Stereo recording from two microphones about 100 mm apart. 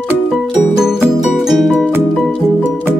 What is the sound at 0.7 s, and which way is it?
Music, 5° right (ahead or behind).